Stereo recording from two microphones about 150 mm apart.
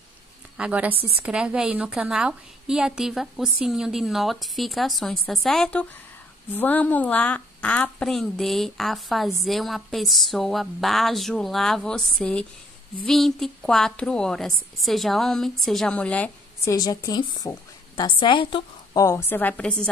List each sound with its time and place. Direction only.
0.6 s a woman's voice: 10° right (ahead or behind); by 16.3 s 10° left (ahead or behind)
16.6 s a woman's voice: 25° left (ahead or behind)
18.9 s a woman's voice: 20° left (ahead or behind)